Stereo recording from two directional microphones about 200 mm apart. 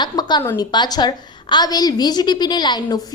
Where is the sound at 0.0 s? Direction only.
20° left (ahead or behind).